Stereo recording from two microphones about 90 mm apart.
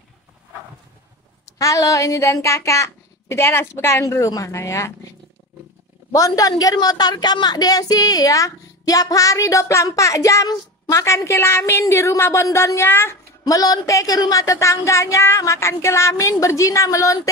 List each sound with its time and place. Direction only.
1.4 s a woman's voice: 40° left (ahead or behind)
6.1 s a woman's voice: 40° left (ahead or behind); by 13.1 s 25° left (ahead or behind)
13.4 s a woman's voice: 45° left (ahead or behind)